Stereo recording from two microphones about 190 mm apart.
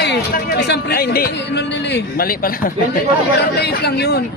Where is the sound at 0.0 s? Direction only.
65° left (ahead or behind).